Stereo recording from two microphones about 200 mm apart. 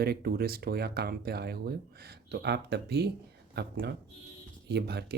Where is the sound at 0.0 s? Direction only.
50° right (ahead or behind).